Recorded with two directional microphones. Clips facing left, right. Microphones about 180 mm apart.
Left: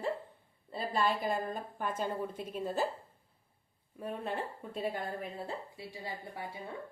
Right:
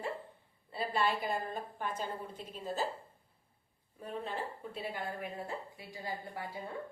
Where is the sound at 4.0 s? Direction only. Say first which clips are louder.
Left 2 dB; 55° left (ahead or behind).